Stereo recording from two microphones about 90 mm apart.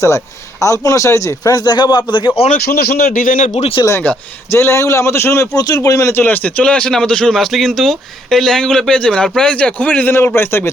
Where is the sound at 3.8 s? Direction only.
55° left (ahead or behind).